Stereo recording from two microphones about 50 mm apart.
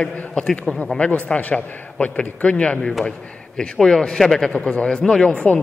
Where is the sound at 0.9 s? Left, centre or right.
Left.